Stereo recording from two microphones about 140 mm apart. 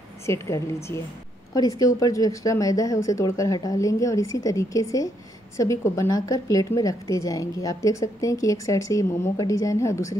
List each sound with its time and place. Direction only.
0.3 s a woman's voice: 20° left (ahead or behind)
1.5 s a woman's voice: 25° left (ahead or behind)